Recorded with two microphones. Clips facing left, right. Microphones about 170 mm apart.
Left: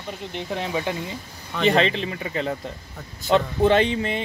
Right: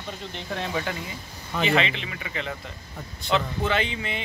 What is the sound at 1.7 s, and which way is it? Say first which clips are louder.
Speech: left 6 dB; 35° left (ahead or behind).